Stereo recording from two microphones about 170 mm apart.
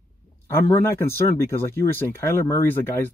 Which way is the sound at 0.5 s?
15° left (ahead or behind).